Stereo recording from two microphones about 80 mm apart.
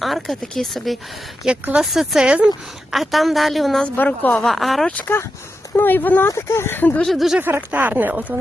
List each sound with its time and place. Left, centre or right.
0.0 s a woman's voice: centre
2.9 s a woman's voice: centre
3.9 s a woman's voice: left
4.4 s a woman's voice: centre
4.9 s a woman's voice: centre
6.2 s speech: left
7.0 s a woman's voice: centre
7.3 s speech: right